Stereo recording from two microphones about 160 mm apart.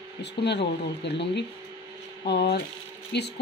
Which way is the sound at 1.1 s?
90° left.